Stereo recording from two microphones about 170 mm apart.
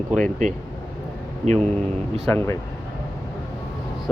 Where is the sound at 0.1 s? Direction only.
45° right (ahead or behind).